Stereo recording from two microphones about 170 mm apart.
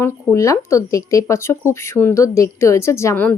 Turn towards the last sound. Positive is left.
turn(degrees=10)  # may be behind; listen again after turning